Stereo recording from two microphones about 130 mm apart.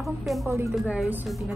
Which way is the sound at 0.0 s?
Centre (ahead or behind).